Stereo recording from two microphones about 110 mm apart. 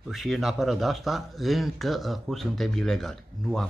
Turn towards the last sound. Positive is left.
turn(degrees=5)  # may be behind; listen again after turning